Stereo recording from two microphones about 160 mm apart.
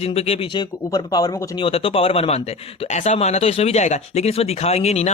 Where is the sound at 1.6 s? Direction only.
35° left (ahead or behind).